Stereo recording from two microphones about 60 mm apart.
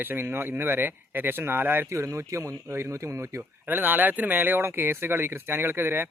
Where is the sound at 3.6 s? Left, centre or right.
Right.